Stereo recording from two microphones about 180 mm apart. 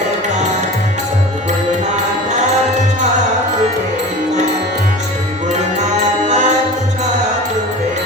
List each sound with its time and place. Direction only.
6.2 s music: 40° right (ahead or behind)